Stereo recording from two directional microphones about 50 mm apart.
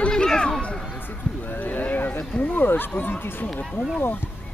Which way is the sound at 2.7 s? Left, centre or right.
Left.